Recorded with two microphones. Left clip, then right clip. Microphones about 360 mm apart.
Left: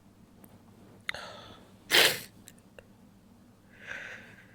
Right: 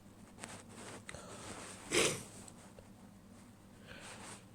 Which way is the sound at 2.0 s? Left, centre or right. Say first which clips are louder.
Left 10 dB; centre.